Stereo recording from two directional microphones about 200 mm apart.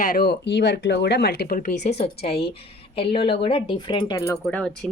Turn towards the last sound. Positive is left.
turn(degrees=5)  # may be behind; listen again after turning